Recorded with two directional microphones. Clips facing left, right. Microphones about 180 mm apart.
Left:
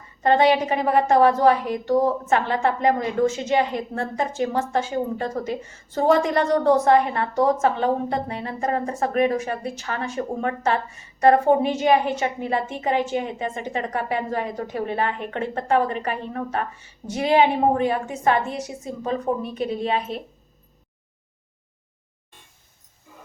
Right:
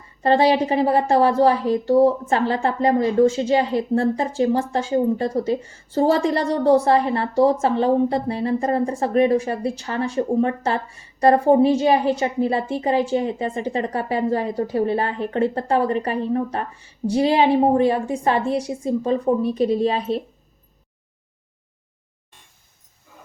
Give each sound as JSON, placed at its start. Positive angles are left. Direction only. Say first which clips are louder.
{"t": 0.2, "sound": "a woman's voice", "louder": "right 1 dB", "side_deg": -30}